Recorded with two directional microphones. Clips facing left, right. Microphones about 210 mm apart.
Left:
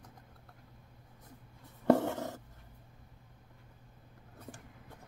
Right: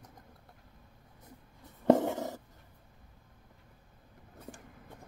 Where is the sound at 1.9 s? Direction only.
15° right (ahead or behind).